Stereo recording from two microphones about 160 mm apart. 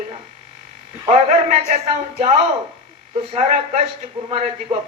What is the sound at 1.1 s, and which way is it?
Speech, 50° right (ahead or behind).